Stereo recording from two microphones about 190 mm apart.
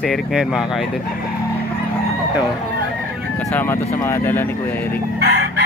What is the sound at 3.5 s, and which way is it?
Speech, 10° left (ahead or behind).